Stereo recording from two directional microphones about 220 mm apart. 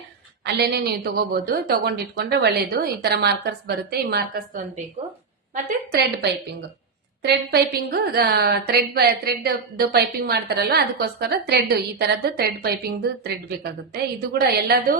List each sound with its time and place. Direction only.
0.4 s a woman's voice: 50° right (ahead or behind)